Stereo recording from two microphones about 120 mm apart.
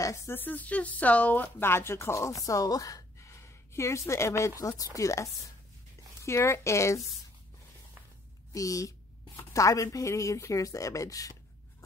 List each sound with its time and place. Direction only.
0.0 s speech: 20° left (ahead or behind)
8.5 s speech: 30° left (ahead or behind)